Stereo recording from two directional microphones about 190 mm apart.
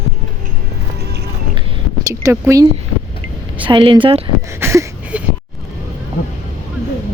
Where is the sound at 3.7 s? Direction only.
25° right (ahead or behind).